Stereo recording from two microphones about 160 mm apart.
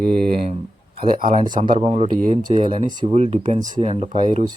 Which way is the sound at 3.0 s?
40° right (ahead or behind).